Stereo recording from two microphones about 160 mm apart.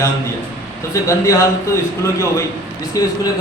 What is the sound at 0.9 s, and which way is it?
A man's voice, 20° left (ahead or behind).